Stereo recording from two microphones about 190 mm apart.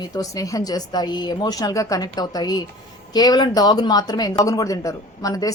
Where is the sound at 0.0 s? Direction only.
20° left (ahead or behind).